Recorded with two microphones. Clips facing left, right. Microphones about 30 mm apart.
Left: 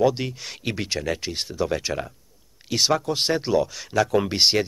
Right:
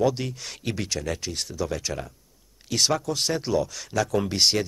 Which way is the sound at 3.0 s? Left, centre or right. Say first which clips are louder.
Left 3 dB; left.